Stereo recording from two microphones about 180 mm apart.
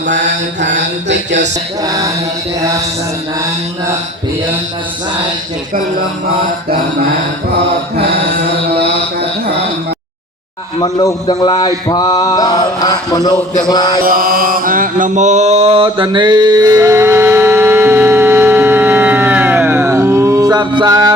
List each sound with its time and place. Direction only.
1.0 s speech: 80° right
10.8 s a sound: 20° left (ahead or behind)
14.0 s mantra: 55° right (ahead or behind); by 21.2 s 20° right (ahead or behind)